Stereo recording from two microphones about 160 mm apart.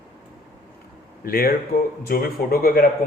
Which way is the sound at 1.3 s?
65° left (ahead or behind).